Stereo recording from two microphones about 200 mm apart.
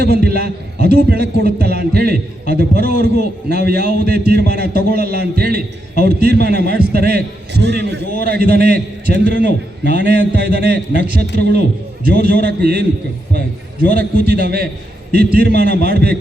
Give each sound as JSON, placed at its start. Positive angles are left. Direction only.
{"t": 0.0, "sound": "a man's voice", "side_deg": -50}
{"t": 13.9, "sound": "a man's voice", "side_deg": -50}